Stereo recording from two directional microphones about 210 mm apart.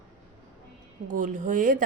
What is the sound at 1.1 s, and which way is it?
Speech, 40° right (ahead or behind).